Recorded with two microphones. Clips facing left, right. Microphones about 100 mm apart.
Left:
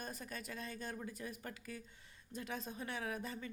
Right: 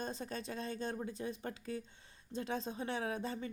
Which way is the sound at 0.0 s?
30° right (ahead or behind).